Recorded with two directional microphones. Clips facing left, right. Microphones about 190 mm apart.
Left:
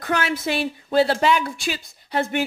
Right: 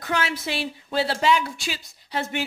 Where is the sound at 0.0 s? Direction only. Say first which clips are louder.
Left 3 dB; 50° left (ahead or behind).